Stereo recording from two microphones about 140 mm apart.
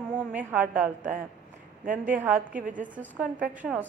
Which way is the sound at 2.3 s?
70° right (ahead or behind).